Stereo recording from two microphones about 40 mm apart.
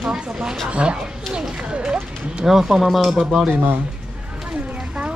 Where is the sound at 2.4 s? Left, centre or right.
Centre.